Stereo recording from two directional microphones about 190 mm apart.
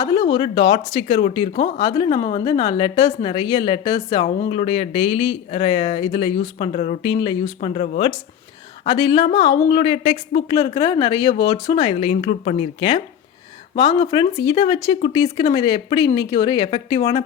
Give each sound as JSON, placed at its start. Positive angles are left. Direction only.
{"t": 0.0, "sound": "speech", "side_deg": 25}